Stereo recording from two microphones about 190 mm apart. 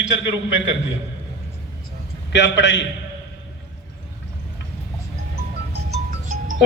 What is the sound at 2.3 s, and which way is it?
Speech, 70° left (ahead or behind).